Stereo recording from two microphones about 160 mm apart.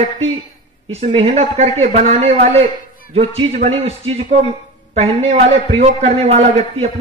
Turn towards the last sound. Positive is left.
turn(degrees=-40)  # may be behind; listen again after turning